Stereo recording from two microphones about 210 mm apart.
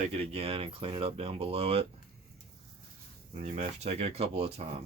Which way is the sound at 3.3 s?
35° right (ahead or behind).